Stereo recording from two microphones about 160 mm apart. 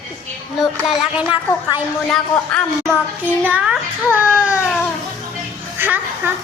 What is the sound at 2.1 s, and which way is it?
Speech, 5° left (ahead or behind).